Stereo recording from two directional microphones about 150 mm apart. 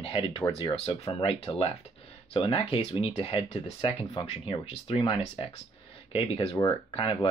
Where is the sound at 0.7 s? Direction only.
40° left (ahead or behind).